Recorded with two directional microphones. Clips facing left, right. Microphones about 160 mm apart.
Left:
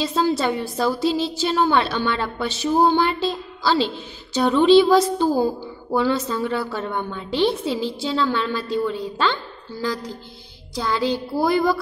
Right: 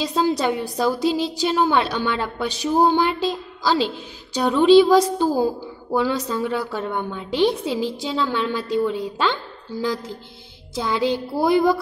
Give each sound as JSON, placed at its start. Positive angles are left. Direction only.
{"t": 0.0, "sound": "a woman's voice", "side_deg": -15}
{"t": 10.7, "sound": "music", "side_deg": -20}